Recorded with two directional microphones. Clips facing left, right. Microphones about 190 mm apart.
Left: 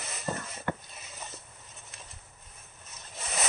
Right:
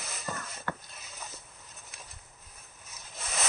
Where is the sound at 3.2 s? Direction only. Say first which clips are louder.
Left 2 dB; 5° left (ahead or behind).